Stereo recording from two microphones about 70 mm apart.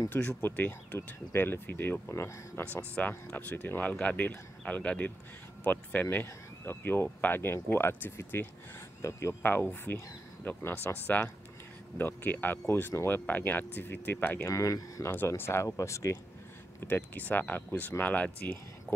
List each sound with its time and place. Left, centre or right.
0.1 s speech: left
2.1 s speech: left
3.0 s speech: left
6.2 s speech: left
9.4 s speech: left
14.5 s speech: left
15.0 s speech: left
15.6 s speech: left
16.8 s speech: left